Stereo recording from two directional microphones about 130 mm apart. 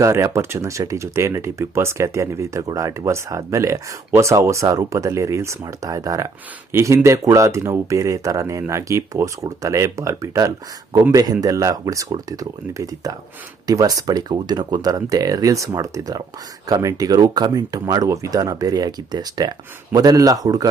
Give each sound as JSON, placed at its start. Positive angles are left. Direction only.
{"t": 0.0, "sound": "speech", "side_deg": -20}